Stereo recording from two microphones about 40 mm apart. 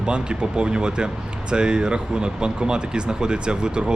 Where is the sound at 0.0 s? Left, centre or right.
Right.